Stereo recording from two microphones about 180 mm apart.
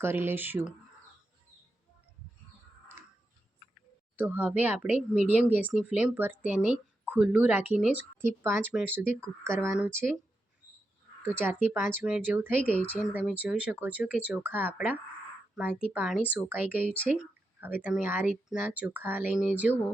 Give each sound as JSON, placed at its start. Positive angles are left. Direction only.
{"t": 0.0, "sound": "speech", "side_deg": -10}
{"t": 4.2, "sound": "speech", "side_deg": -10}
{"t": 11.2, "sound": "speech", "side_deg": -10}